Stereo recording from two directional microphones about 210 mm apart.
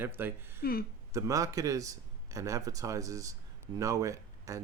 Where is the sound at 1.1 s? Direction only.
15° right (ahead or behind).